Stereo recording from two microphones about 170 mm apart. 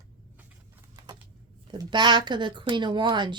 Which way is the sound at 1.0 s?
25° right (ahead or behind).